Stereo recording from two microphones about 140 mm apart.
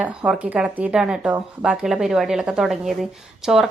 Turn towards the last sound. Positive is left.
turn(degrees=0)  # may be behind; listen again after turning